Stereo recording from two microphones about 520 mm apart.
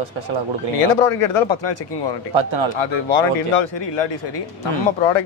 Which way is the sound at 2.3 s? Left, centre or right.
Right.